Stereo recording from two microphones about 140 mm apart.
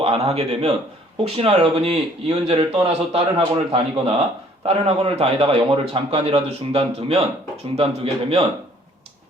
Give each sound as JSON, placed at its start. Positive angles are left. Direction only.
{"t": 0.0, "sound": "a man's voice", "side_deg": -45}